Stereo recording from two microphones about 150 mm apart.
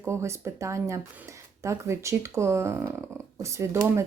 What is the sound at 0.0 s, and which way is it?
Speech, 20° right (ahead or behind).